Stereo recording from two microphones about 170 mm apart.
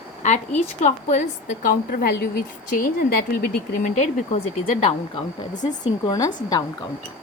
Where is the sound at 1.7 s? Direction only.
60° left (ahead or behind).